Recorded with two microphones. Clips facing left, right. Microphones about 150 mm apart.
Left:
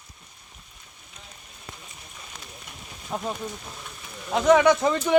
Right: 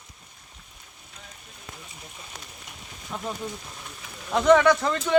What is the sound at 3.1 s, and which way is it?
Speech, 40° left (ahead or behind).